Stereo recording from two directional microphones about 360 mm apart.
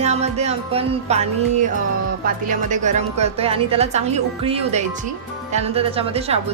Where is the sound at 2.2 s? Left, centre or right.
Right.